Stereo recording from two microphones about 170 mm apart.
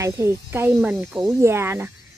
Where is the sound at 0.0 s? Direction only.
15° right (ahead or behind).